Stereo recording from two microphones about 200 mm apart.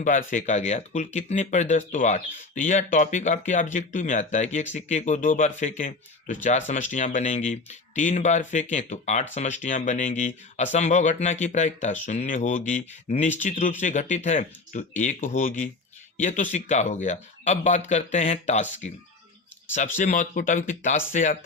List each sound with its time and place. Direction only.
0.0 s speech: 40° left (ahead or behind)
20.0 s speech: 40° left (ahead or behind)